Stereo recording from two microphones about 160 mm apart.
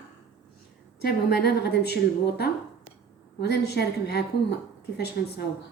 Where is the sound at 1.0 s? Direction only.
80° left.